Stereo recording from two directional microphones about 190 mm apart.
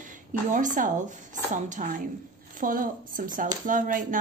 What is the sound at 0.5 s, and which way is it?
A woman's voice, 45° right (ahead or behind).